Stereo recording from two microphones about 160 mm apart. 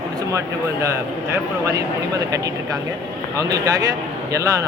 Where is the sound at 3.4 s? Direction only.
20° right (ahead or behind).